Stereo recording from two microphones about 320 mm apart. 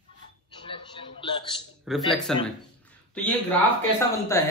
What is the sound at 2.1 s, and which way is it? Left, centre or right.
A man's voice, centre.